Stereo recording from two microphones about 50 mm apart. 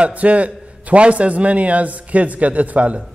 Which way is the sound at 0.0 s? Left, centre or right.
Right.